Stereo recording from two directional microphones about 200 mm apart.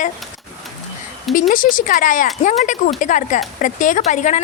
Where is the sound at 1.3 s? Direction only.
45° left (ahead or behind).